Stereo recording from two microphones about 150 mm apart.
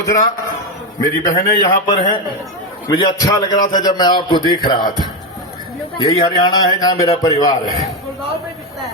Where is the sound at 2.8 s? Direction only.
25° left (ahead or behind).